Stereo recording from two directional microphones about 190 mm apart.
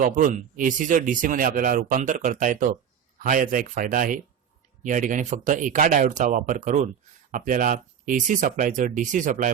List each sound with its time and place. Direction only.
0.0 s speech: 45° right (ahead or behind)